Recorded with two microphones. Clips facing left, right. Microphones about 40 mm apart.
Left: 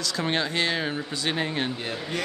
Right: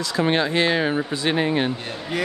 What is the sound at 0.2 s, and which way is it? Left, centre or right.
Speech, centre.